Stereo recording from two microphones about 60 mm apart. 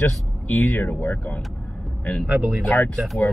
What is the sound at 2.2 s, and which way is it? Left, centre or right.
Speech, right.